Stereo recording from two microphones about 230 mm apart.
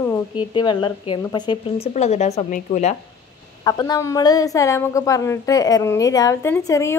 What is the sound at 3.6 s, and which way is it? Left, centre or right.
A woman's voice, centre.